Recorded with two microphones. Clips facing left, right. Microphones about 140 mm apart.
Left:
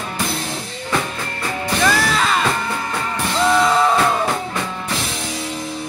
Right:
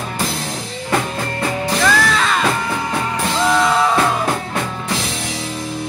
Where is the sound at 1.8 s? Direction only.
5° left (ahead or behind).